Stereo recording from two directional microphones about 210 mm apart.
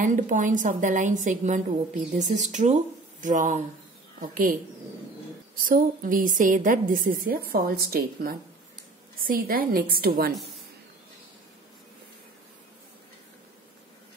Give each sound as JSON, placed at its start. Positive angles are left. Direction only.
{"t": 0.0, "sound": "a woman's voice", "side_deg": -40}
{"t": 5.7, "sound": "a woman's voice", "side_deg": -40}